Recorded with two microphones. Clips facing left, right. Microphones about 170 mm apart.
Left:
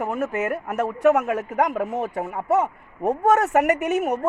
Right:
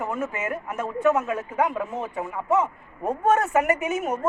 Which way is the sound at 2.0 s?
45° left (ahead or behind).